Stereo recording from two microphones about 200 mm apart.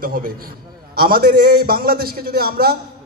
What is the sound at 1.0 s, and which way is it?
A man's voice, 50° right (ahead or behind).